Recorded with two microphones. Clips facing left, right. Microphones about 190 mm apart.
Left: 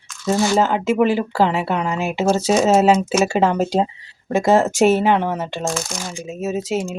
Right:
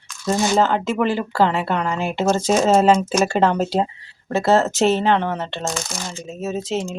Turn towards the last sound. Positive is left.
turn(degrees=10)  # may be behind; listen again after turning